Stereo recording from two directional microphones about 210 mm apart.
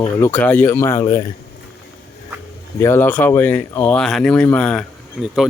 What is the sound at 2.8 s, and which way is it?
Speech, 10° left (ahead or behind).